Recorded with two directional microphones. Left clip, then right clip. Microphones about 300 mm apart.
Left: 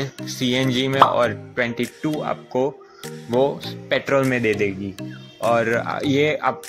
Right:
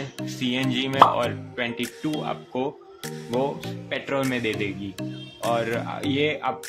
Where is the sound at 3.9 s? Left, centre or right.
Centre.